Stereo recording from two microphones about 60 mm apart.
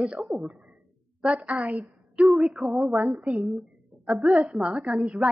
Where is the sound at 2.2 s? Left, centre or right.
Centre.